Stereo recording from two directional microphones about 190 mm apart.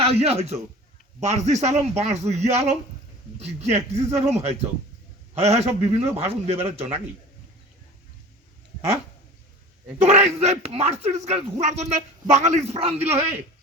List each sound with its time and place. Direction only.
0.0 s speech: 30° right (ahead or behind)
10.0 s speech: 35° right (ahead or behind)